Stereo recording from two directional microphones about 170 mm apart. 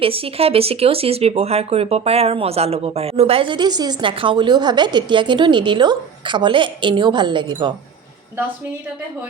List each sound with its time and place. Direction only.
0.0 s speech: 35° right (ahead or behind)